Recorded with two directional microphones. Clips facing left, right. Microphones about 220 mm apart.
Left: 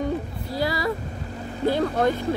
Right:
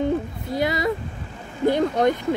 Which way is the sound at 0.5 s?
20° right (ahead or behind).